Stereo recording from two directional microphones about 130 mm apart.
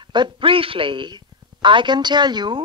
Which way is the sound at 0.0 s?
35° right (ahead or behind).